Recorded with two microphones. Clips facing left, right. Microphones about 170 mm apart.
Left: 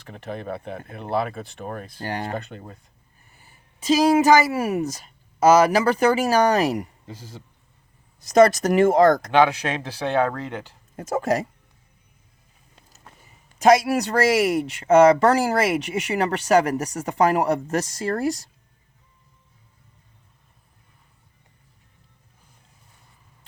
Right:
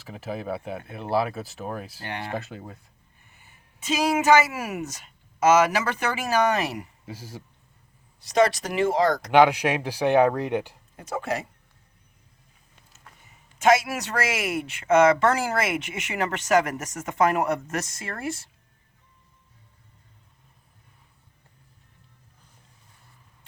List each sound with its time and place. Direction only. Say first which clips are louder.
0.0 s speech: even; 5° right (ahead or behind)
2.0 s speech: left 5 dB; 40° left (ahead or behind)
2.3 s speech: left 1 dB; 5° right (ahead or behind)
3.2 s a woman's voice: left 2 dB; 35° left (ahead or behind)
7.0 s a man's voice: right 1 dB; 10° right (ahead or behind)
8.2 s speech: left 6 dB; 45° left (ahead or behind)
9.3 s speech: right 1 dB; 15° right (ahead or behind)
10.9 s speech: left 6 dB; 40° left (ahead or behind)
12.7 s a sound: left 3 dB; 30° left (ahead or behind)
13.6 s speech: left 4 dB; 35° left (ahead or behind)